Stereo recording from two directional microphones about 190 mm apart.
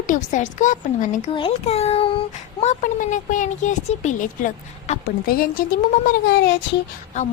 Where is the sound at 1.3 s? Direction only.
25° left (ahead or behind); by 6.6 s 60° left (ahead or behind).